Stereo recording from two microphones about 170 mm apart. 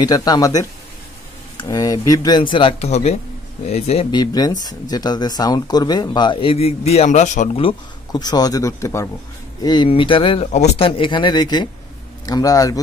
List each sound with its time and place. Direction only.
0.0 s speech: 20° left (ahead or behind)
2.5 s speech: 35° left (ahead or behind)
4.2 s speech: 25° left (ahead or behind)